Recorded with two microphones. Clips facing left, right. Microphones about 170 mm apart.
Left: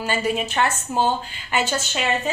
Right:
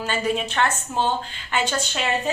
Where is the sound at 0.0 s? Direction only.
10° left (ahead or behind).